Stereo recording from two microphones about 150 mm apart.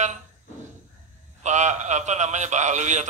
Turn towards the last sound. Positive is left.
turn(degrees=-55)  # may be behind; listen again after turning